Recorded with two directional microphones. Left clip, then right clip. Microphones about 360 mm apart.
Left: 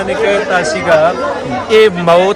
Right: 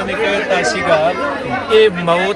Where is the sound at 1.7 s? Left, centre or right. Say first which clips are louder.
Left 4 dB; left.